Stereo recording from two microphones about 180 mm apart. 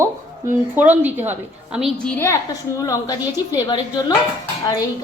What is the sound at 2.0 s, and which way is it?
A woman's voice, 15° left (ahead or behind).